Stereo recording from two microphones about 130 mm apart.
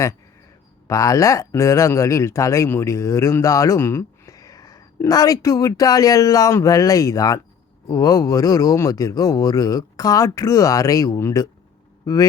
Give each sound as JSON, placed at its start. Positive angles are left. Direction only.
{"t": 0.9, "sound": "speech", "side_deg": 25}